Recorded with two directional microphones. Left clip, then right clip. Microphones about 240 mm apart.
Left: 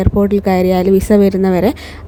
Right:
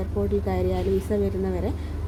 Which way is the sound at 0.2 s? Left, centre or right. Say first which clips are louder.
Left 12 dB; left.